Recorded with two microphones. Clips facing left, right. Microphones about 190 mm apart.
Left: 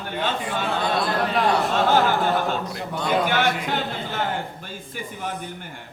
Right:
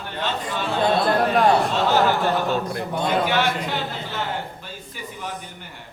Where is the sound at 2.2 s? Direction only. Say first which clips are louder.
Right 1 dB; 55° right (ahead or behind).